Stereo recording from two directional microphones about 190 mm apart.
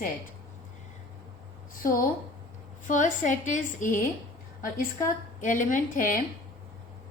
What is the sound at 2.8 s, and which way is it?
A woman's voice, 40° left (ahead or behind).